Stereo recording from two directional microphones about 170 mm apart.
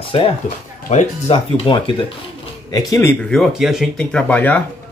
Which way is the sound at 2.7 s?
15° left (ahead or behind).